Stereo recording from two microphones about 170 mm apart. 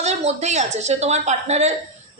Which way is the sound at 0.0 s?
40° right (ahead or behind).